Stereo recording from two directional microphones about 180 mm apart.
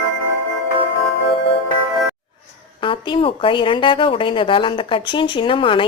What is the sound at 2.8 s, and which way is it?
Speech, 30° left (ahead or behind).